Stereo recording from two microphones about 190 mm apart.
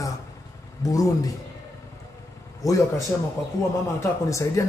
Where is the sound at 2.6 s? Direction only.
20° left (ahead or behind).